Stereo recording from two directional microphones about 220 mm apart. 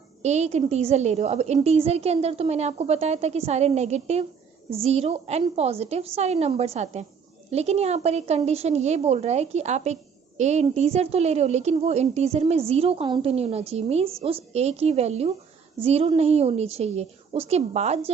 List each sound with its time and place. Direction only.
0.2 s a woman's voice: 30° right (ahead or behind)